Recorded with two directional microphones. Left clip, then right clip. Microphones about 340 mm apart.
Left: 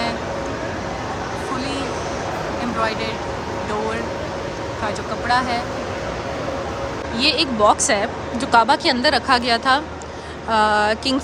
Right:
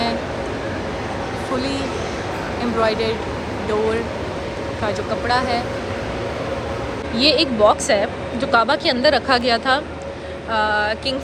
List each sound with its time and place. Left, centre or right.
2.8 s a woman's voice: centre
5.3 s a woman's voice: centre
7.2 s a woman's voice: centre